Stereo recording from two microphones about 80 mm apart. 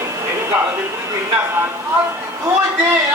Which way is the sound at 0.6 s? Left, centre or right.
Right.